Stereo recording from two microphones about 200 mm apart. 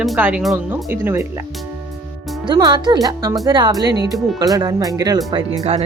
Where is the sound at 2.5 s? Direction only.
20° right (ahead or behind).